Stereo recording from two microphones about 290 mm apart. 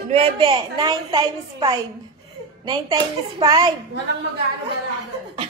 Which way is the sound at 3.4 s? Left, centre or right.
Centre.